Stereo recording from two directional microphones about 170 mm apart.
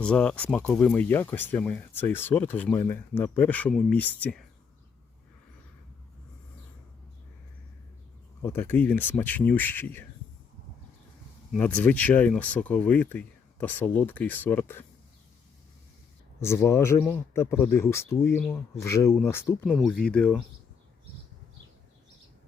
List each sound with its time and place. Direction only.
0.0 s speech: 5° left (ahead or behind)
8.4 s speech: 15° left (ahead or behind)
11.5 s speech: 10° left (ahead or behind)
16.4 s speech: 15° left (ahead or behind)
18.3 s speech: 5° left (ahead or behind)
18.8 s speech: 15° left (ahead or behind)
19.6 s speech: centre (ahead or behind)